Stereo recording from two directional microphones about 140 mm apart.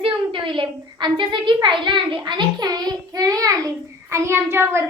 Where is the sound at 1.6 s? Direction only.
35° right (ahead or behind).